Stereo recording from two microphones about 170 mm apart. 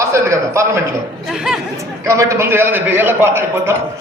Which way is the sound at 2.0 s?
20° right (ahead or behind).